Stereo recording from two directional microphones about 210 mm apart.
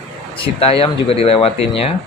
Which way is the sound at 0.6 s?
30° left (ahead or behind).